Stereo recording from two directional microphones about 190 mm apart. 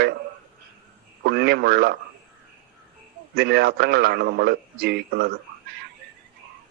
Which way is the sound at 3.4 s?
60° right (ahead or behind).